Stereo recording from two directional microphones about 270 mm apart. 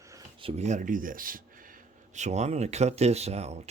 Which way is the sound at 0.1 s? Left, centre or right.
Centre.